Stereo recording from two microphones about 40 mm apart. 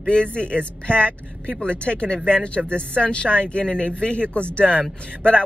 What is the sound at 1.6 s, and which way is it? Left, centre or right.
Speech, left.